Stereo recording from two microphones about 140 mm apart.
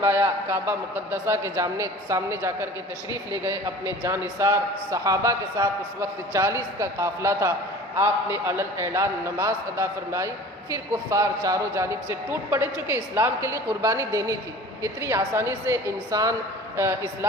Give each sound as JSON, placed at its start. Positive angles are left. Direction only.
{"t": 0.0, "sound": "a man's voice", "side_deg": -15}